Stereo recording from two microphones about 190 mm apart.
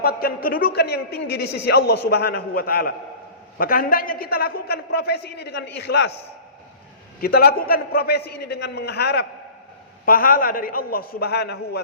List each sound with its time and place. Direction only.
0.0 s speech: 50° left (ahead or behind)
7.2 s a man's voice: 55° left (ahead or behind)